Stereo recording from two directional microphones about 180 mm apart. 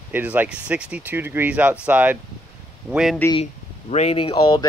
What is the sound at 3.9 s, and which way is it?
Speech, 35° left (ahead or behind).